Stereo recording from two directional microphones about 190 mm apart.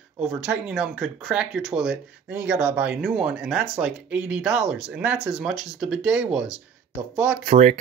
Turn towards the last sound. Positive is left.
turn(degrees=-35)  # may be behind; listen again after turning